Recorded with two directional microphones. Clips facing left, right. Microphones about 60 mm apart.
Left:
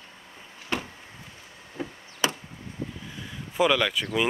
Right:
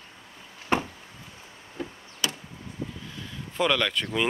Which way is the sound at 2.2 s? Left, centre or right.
Left.